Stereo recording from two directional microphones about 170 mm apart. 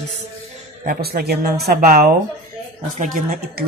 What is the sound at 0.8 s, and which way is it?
Speech, 60° right (ahead or behind).